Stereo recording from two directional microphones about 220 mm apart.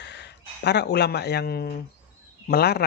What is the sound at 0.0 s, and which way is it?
Speech, 50° left (ahead or behind).